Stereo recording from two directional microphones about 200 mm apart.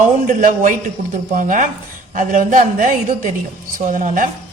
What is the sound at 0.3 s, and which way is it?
A woman's voice, 40° right (ahead or behind).